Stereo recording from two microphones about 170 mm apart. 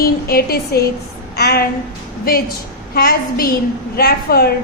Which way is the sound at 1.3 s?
70° left (ahead or behind).